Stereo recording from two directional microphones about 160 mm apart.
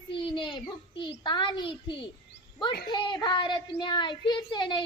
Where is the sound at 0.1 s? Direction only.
30° left (ahead or behind).